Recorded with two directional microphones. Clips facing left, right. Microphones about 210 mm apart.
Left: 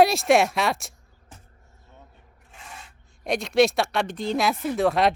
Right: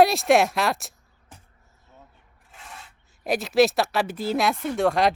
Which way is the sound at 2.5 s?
Centre (ahead or behind).